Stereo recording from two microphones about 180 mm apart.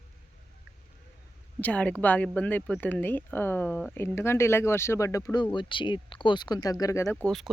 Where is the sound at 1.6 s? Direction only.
5° left (ahead or behind).